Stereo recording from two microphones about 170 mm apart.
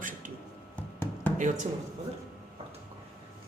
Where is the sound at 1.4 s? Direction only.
45° right (ahead or behind).